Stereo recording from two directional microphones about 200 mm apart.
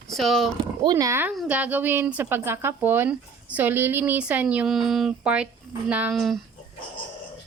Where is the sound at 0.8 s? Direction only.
20° right (ahead or behind); by 6.4 s centre (ahead or behind).